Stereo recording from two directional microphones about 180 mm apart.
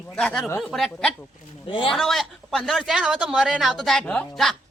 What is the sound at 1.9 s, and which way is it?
Speech, centre (ahead or behind).